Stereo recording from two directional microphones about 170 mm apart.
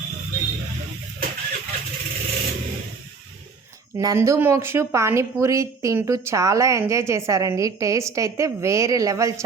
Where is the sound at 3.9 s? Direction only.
15° right (ahead or behind).